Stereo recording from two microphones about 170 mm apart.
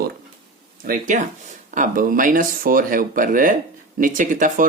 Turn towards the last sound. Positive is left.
turn(degrees=-50)  # may be behind; listen again after turning